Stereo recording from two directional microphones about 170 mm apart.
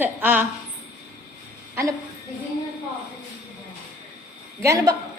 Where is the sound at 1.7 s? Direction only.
20° right (ahead or behind).